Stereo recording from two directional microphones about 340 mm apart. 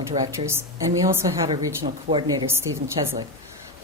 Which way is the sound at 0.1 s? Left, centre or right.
Centre.